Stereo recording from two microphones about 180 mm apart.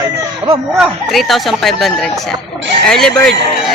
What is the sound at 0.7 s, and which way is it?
Speech, centre (ahead or behind).